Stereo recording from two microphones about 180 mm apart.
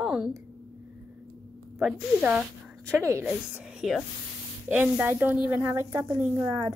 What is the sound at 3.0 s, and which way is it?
Speech, 15° right (ahead or behind).